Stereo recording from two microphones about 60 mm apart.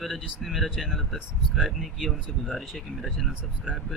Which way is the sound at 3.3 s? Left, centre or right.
Centre.